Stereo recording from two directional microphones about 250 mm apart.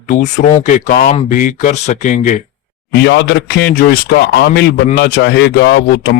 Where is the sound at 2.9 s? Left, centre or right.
Left.